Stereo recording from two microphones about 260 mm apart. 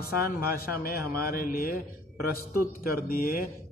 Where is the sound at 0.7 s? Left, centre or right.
Left.